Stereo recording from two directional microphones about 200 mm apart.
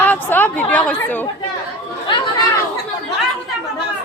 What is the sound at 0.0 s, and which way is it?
Chatter, 10° left (ahead or behind).